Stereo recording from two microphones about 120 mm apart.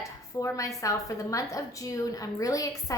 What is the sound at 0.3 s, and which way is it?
A woman's voice, 25° left (ahead or behind).